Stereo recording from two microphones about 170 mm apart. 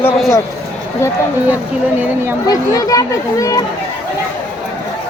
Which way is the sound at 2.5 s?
20° left (ahead or behind).